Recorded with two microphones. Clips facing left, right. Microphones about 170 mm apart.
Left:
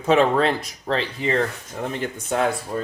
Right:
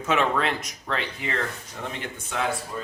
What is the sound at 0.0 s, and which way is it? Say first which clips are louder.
Speech: left 6 dB; 35° left (ahead or behind).